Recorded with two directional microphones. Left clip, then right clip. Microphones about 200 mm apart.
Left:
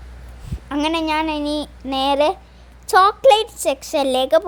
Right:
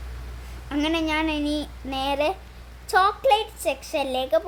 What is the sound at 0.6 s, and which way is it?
A woman's voice, 30° left (ahead or behind).